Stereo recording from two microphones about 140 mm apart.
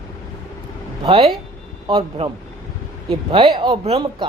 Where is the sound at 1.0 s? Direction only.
40° right (ahead or behind).